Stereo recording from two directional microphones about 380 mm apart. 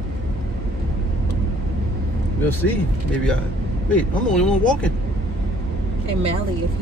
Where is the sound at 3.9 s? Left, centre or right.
Centre.